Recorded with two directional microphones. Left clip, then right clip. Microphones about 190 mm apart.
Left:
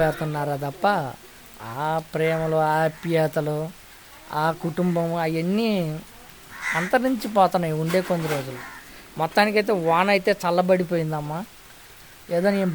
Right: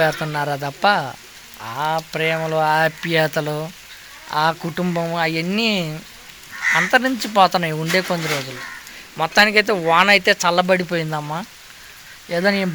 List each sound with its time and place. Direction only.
0.3 s speech: centre (ahead or behind)
9.1 s speech: 10° left (ahead or behind); by 11.4 s 10° right (ahead or behind)
12.3 s speech: 5° left (ahead or behind)